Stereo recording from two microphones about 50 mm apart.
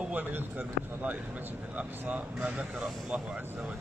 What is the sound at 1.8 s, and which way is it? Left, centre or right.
Speech, right.